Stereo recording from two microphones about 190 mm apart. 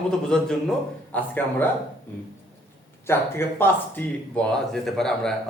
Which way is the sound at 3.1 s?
10° left (ahead or behind).